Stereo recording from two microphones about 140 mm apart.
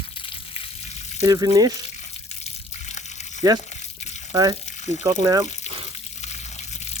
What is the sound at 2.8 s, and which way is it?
Water, 55° left (ahead or behind).